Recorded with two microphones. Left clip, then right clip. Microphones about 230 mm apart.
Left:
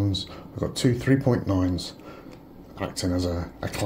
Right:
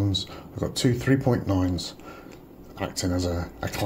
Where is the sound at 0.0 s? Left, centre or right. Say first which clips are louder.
Right 1 dB; centre.